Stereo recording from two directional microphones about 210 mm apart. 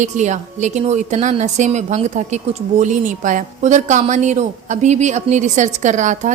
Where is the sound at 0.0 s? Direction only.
35° right (ahead or behind).